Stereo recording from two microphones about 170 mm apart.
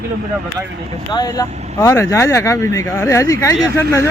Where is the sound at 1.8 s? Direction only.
15° left (ahead or behind).